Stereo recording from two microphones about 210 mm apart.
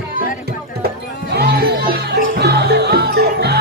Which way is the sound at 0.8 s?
50° right (ahead or behind).